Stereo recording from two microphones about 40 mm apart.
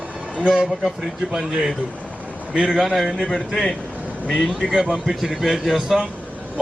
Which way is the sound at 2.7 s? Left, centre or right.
Centre.